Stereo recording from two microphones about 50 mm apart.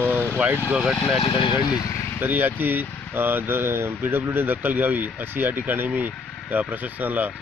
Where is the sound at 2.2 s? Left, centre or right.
Right.